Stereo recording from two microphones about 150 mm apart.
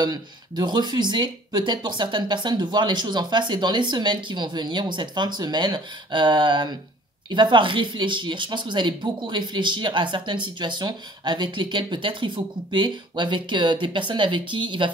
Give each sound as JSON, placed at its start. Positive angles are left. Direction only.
{"t": 0.0, "sound": "speech", "side_deg": -30}